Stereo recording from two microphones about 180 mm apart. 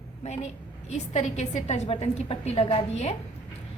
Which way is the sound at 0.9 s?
35° left (ahead or behind).